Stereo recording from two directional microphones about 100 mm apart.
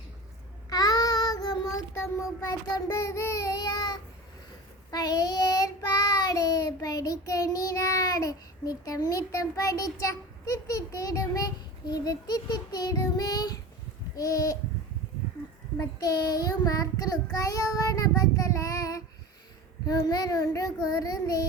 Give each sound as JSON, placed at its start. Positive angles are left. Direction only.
{"t": 0.7, "sound": "child singing", "side_deg": 40}
{"t": 15.8, "sound": "child singing", "side_deg": 40}